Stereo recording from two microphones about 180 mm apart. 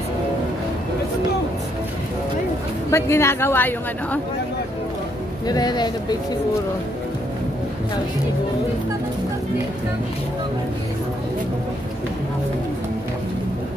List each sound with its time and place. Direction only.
2.9 s a woman's voice: 15° left (ahead or behind)
5.5 s speech: 20° left (ahead or behind)